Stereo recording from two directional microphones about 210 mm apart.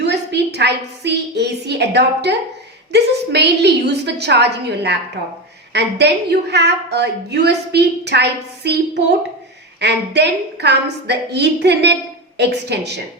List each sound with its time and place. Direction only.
0.0 s a woman's voice: 55° right (ahead or behind)